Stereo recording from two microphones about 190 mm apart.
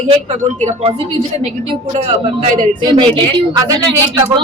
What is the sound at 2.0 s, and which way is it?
Speech, 35° right (ahead or behind).